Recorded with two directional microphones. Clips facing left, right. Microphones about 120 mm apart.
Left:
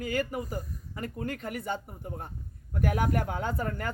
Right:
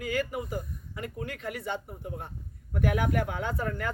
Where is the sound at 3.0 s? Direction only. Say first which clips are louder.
Even; 40° left (ahead or behind).